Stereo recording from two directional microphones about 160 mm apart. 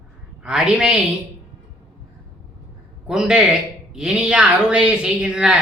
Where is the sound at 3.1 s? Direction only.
5° right (ahead or behind).